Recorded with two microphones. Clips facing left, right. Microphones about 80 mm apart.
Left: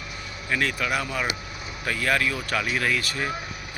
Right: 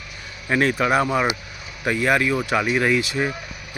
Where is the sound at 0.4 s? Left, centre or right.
Right.